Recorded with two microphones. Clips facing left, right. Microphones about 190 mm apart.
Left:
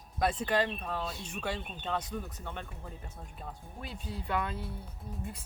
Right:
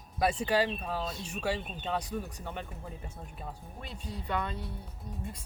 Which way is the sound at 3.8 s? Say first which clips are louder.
Left 2 dB; 5° left (ahead or behind).